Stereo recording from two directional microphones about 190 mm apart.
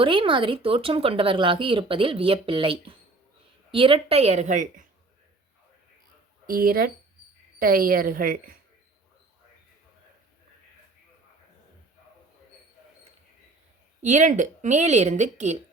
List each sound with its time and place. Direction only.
0.0 s speech: 25° right (ahead or behind)
6.5 s a woman's voice: 50° right (ahead or behind)
14.0 s speech: 40° right (ahead or behind)